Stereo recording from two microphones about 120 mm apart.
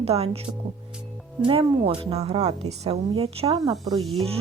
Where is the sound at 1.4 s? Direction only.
50° right (ahead or behind).